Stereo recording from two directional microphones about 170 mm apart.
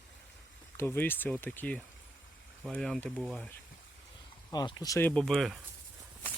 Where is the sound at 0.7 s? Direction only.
10° left (ahead or behind).